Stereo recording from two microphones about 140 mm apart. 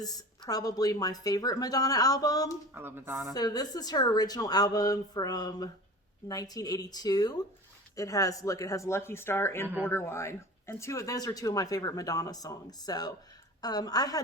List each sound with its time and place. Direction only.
0.0 s speech: 25° left (ahead or behind)
2.7 s speech: 15° right (ahead or behind)
3.3 s speech: 30° left (ahead or behind)